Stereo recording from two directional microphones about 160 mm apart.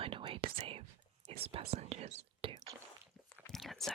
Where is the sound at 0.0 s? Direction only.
30° right (ahead or behind).